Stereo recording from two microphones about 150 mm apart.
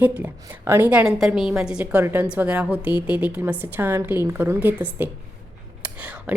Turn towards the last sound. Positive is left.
turn(degrees=-10)  # may be behind; listen again after turning